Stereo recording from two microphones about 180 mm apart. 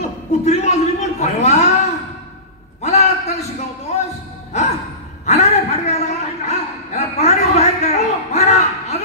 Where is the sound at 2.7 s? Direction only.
40° left (ahead or behind).